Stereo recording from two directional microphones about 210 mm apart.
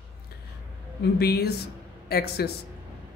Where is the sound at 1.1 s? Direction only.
50° left (ahead or behind).